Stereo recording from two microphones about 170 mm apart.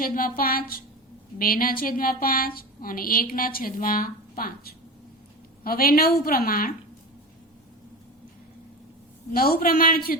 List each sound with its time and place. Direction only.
0.0 s a woman's voice: 55° left (ahead or behind)
9.3 s a woman's voice: 60° left (ahead or behind)